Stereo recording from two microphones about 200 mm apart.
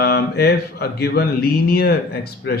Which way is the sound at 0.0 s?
55° left (ahead or behind).